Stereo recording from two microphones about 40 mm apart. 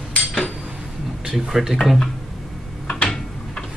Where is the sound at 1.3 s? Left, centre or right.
Centre.